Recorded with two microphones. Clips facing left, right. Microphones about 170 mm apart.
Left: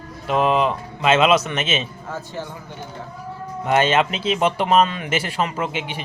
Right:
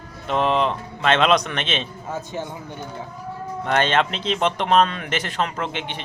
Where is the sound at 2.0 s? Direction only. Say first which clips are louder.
Right 1 dB; 15° right (ahead or behind).